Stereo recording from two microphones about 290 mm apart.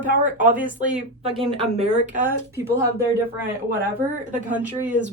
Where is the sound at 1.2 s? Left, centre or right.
Centre.